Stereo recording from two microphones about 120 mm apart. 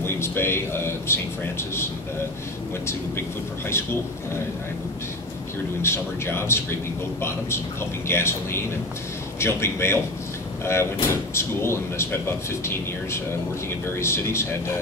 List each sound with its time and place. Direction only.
0.0 s a man's voice: 20° left (ahead or behind)
5.8 s a man's voice: 20° left (ahead or behind)